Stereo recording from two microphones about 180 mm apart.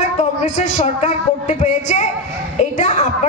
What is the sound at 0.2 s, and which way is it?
A woman's voice, 40° left (ahead or behind).